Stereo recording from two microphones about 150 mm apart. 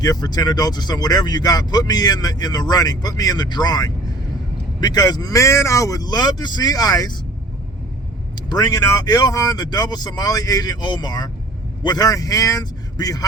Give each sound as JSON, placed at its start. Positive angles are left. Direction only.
{"t": 0.0, "sound": "speech", "side_deg": 25}
{"t": 8.4, "sound": "speech", "side_deg": 25}